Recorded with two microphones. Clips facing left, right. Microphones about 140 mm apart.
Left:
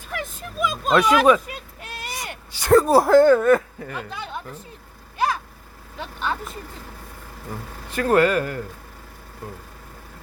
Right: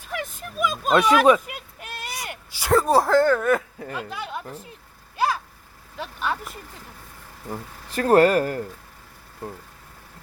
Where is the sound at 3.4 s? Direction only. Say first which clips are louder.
Left 5 dB; 5° right (ahead or behind).